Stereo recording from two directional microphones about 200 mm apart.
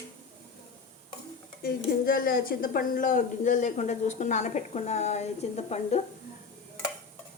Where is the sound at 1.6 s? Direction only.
45° left (ahead or behind).